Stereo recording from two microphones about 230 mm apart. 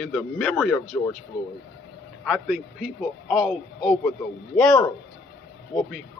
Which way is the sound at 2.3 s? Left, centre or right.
Centre.